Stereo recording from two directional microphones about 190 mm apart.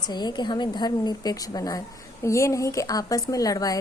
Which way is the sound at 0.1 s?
20° left (ahead or behind).